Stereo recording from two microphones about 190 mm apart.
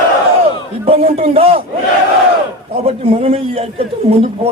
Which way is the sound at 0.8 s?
30° right (ahead or behind).